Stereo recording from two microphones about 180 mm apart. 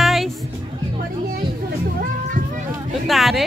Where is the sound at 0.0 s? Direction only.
Centre (ahead or behind).